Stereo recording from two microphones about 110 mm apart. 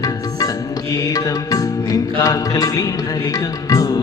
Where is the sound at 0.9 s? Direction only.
35° left (ahead or behind).